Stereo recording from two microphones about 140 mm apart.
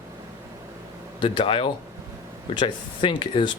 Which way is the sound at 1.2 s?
40° left (ahead or behind).